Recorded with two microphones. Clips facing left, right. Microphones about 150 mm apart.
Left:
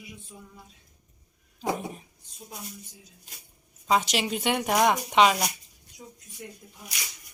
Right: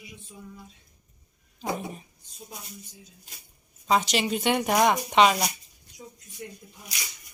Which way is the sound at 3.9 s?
5° left (ahead or behind).